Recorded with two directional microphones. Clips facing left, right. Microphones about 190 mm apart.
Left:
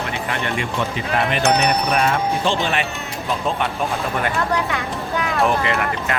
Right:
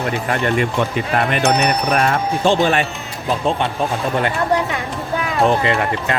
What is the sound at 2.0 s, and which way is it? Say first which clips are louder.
Speech: right 2 dB; 45° right (ahead or behind).